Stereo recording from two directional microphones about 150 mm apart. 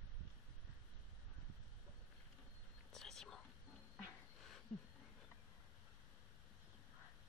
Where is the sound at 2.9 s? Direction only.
5° left (ahead or behind).